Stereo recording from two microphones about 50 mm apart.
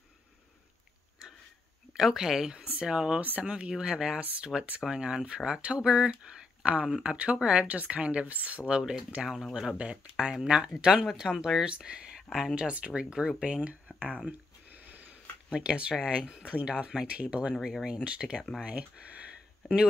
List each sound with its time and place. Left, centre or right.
2.0 s speech: centre
3.2 s speech: right
3.4 s speech: centre
9.2 s speech: centre
12.2 s speech: centre
12.5 s speech: right
14.2 s a sound: right
15.5 s speech: right